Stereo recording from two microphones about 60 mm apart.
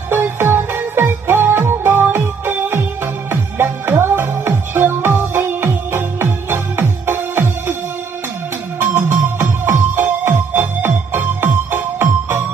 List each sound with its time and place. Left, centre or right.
0.1 s music: right
8.7 s music: right